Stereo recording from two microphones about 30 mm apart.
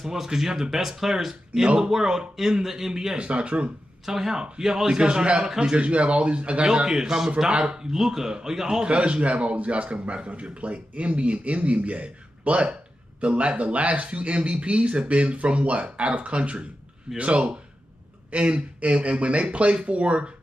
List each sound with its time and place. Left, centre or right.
0.0 s speech: centre
3.2 s speech: right
4.0 s speech: centre
4.9 s speech: right
5.8 s speech: right
6.6 s a man's voice: right
7.4 s a man's voice: right
7.9 s speech: centre
8.8 s speech: right
10.0 s speech: right
13.2 s speech: right
13.6 s speech: right